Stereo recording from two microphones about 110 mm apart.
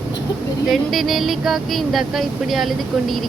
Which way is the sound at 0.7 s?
Centre (ahead or behind).